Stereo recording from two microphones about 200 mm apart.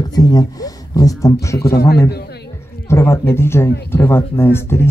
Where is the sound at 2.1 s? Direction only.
55° left (ahead or behind).